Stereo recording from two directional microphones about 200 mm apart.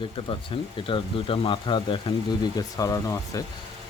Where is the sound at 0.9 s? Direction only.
25° left (ahead or behind).